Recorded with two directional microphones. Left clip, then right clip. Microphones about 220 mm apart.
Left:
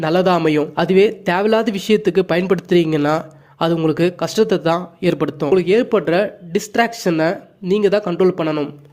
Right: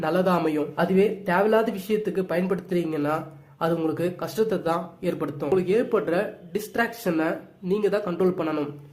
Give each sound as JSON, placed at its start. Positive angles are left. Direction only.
{"t": 0.0, "sound": "speech", "side_deg": 35}